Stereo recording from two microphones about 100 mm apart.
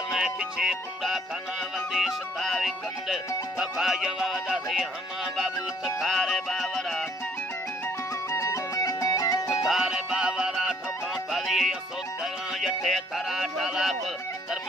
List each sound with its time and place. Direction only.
0.1 s music: 5° right (ahead or behind)
8.3 s music: 30° left (ahead or behind)
9.7 s music: 5° right (ahead or behind)
12.5 s speech: centre (ahead or behind)